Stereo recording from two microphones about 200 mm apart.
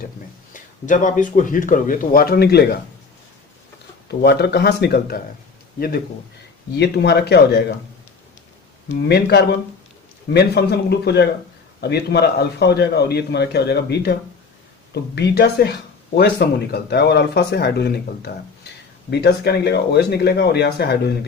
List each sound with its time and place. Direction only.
0.5 s speech: 40° left (ahead or behind)
4.1 s a man's voice: 55° left (ahead or behind)
6.7 s a man's voice: 55° left (ahead or behind)
9.0 s a man's voice: 55° left (ahead or behind)